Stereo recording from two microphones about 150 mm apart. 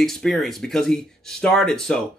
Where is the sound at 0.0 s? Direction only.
5° left (ahead or behind).